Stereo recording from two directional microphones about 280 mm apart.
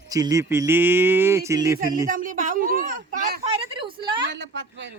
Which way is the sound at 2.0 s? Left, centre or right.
Right.